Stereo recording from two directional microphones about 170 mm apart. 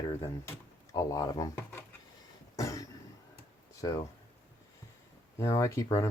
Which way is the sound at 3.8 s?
20° left (ahead or behind).